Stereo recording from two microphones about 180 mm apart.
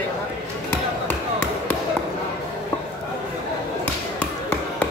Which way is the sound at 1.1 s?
10° left (ahead or behind).